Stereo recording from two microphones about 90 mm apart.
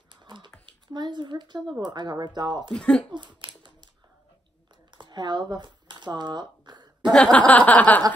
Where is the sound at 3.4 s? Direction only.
65° right (ahead or behind).